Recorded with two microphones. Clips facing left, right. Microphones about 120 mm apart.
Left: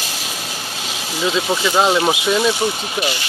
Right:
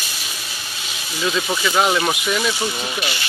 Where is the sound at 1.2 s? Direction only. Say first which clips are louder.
Left 3 dB; 25° left (ahead or behind).